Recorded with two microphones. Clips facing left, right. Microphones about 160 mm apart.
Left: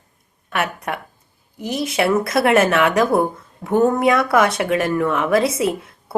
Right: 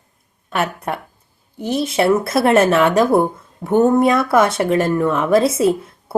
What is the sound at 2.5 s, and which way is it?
Speech, centre (ahead or behind).